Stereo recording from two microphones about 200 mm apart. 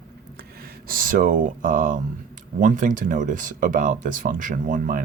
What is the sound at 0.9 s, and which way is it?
Speech, 45° right (ahead or behind).